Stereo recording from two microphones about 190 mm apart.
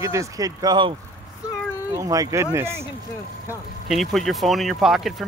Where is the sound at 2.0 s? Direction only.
15° right (ahead or behind).